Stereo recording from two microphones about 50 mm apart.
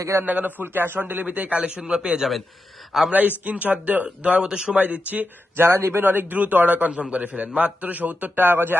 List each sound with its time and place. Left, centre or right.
0.3 s a man's voice: right
0.6 s speech: right; by 2.2 s centre
3.1 s speech: right
4.8 s a man's voice: right
5.5 s a man's voice: right
6.0 s a man's voice: right